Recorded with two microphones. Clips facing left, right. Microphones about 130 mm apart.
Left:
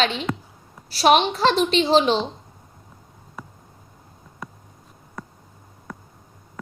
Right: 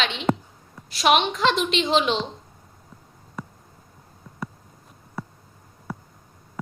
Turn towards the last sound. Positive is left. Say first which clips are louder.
# right 3 dB
turn(degrees=-5)  # may be behind; listen again after turning